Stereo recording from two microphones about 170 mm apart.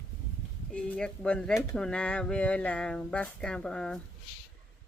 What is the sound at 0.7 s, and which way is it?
Speech, 5° left (ahead or behind).